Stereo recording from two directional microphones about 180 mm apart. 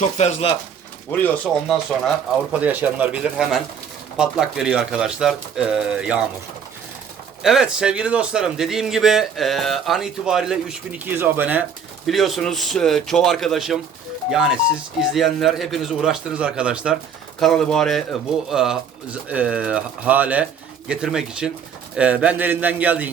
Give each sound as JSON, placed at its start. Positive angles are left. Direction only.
{"t": 0.0, "sound": "speech", "side_deg": 35}
{"t": 1.1, "sound": "speech", "side_deg": 10}
{"t": 1.7, "sound": "a man's voice", "side_deg": -5}
{"t": 7.4, "sound": "a man's voice", "side_deg": -5}
{"t": 12.0, "sound": "a man's voice", "side_deg": 0}